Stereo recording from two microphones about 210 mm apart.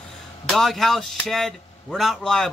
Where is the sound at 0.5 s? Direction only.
Centre (ahead or behind).